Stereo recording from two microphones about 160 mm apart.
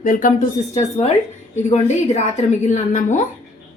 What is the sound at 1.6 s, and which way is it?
Speech, 45° left (ahead or behind).